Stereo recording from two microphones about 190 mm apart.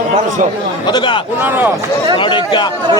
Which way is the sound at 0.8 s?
25° left (ahead or behind).